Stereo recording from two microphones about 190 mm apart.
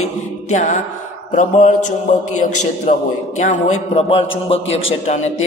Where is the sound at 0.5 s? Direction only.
40° left (ahead or behind).